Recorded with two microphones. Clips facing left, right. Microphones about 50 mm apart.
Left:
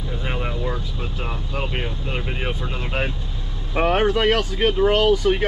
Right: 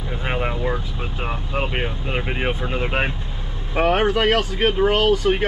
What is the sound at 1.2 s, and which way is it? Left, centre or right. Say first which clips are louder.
Speech: right 4 dB; right.